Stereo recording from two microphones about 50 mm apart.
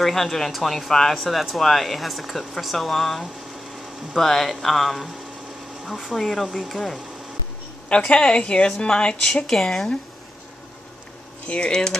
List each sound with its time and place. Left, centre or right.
0.0 s speech: centre
8.1 s a woman's voice: centre
9.3 s speech: centre
11.4 s speech: left
11.7 s a woman's voice: centre